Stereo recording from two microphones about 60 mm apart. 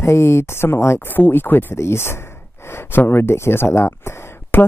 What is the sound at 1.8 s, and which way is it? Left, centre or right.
Speech, left.